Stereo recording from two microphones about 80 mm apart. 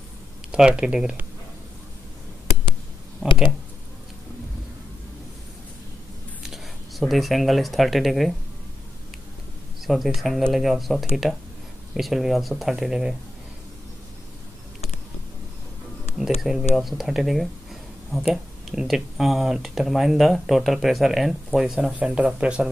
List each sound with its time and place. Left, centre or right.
0.5 s speech: centre
3.2 s speech: left
6.4 s speech: centre
9.8 s speech: centre
16.2 s speech: centre